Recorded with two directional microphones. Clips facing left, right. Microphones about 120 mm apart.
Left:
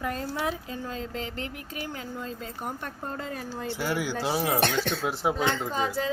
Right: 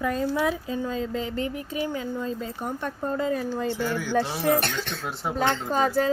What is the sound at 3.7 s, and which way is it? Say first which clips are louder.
Speech: right 2 dB; 10° left (ahead or behind).